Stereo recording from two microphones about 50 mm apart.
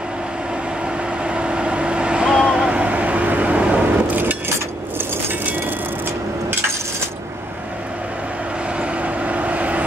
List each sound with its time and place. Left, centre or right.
1.2 s vehicle: right
2.7 s vehicle: right
4.9 s a sound: right
8.7 s vehicle: right